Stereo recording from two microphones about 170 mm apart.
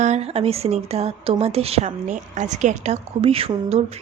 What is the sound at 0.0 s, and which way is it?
Speech, 40° right (ahead or behind).